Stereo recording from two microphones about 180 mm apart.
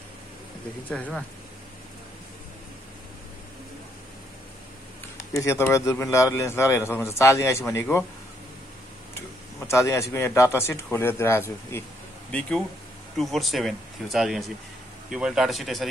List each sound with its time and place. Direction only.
0.8 s speech: 5° left (ahead or behind)
5.3 s speech: 15° left (ahead or behind)
9.7 s speech: 15° left (ahead or behind); by 15.9 s centre (ahead or behind)